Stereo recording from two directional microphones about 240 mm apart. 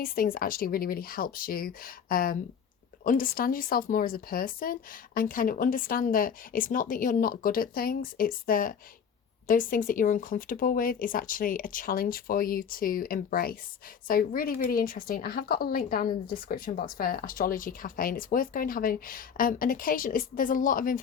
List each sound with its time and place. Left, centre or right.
0.0 s a woman's voice: left